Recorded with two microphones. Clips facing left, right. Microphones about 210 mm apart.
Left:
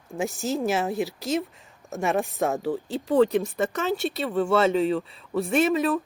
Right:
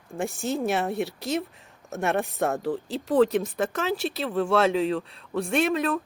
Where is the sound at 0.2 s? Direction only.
Centre (ahead or behind).